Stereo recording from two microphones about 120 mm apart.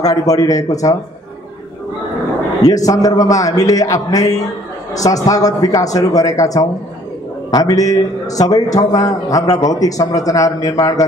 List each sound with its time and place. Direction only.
0.0 s a man's voice: 30° left (ahead or behind)
2.6 s a man's voice: 30° left (ahead or behind)